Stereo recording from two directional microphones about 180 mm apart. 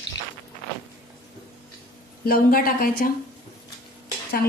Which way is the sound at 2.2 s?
55° left (ahead or behind).